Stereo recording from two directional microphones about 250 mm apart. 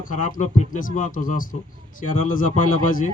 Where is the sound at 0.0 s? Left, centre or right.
Left.